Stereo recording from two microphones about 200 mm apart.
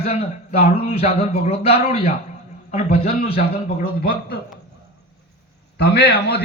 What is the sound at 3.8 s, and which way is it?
Speech, 50° left (ahead or behind).